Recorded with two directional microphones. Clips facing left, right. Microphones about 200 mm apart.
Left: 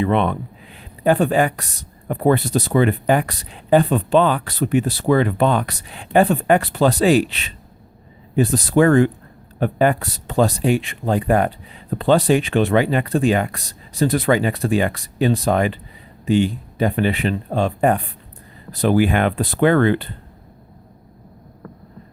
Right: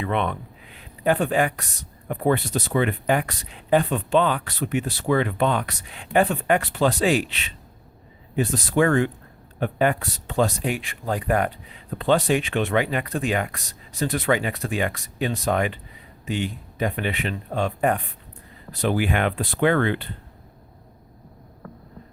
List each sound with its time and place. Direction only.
0.0 s speech: 35° left (ahead or behind)